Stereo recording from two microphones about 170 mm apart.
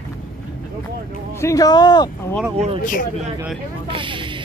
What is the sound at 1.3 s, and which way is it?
Speech, 20° left (ahead or behind).